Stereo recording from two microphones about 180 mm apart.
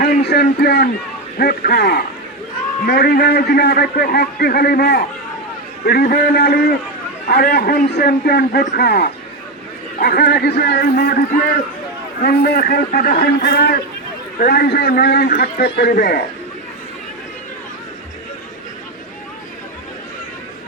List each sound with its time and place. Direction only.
0.0 s a man's voice: 65° left (ahead or behind)
12.2 s a man's voice: 60° left (ahead or behind)